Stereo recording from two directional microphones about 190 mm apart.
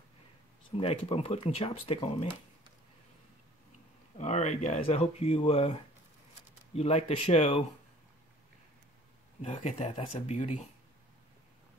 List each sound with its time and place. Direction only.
0.7 s speech: 30° left (ahead or behind)
4.2 s speech: 35° left (ahead or behind)
9.4 s speech: 40° left (ahead or behind)